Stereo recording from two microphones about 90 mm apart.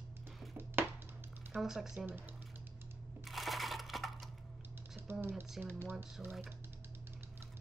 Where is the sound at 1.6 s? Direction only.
5° right (ahead or behind).